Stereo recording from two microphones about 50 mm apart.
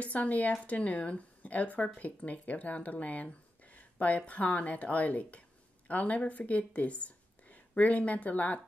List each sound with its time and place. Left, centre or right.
0.0 s a woman's voice: left